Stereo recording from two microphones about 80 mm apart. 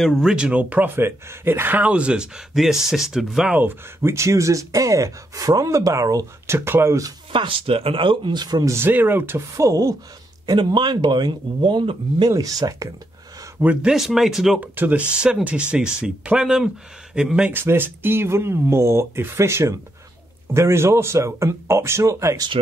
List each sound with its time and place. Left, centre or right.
0.0 s speech: centre
0.3 s speech: centre
3.5 s speech: right
6.5 s speech: right
7.3 s speech: right
8.6 s speech: right
9.6 s speech: right
10.4 s speech: right
12.3 s speech: right
13.8 s speech: centre
14.6 s speech: right
17.5 s speech: right